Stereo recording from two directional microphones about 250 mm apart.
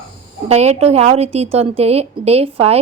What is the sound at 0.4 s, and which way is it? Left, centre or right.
A woman's voice, right.